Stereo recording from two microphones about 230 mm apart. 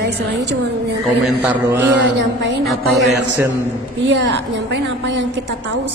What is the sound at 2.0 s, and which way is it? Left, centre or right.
Speech, right.